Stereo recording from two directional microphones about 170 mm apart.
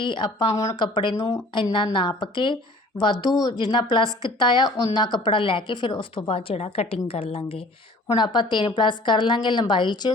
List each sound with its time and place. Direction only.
0.0 s a woman's voice: 30° left (ahead or behind)
3.6 s a woman's voice: 25° left (ahead or behind)